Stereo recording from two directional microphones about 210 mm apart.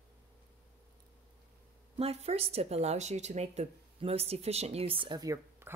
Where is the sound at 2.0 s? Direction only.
30° right (ahead or behind).